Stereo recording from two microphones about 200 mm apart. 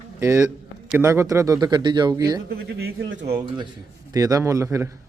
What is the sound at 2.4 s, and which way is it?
Speech, 50° right (ahead or behind).